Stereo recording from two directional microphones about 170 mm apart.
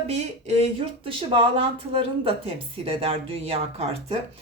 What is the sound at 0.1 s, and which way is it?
Speech, 40° right (ahead or behind).